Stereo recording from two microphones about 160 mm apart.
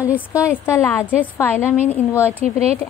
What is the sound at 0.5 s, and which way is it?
A woman's voice, 15° left (ahead or behind).